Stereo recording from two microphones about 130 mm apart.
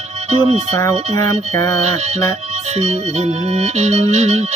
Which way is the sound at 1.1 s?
25° left (ahead or behind).